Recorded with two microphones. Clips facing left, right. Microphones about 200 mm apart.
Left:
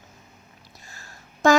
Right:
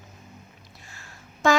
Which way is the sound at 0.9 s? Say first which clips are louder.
Left 1 dB; 40° left (ahead or behind).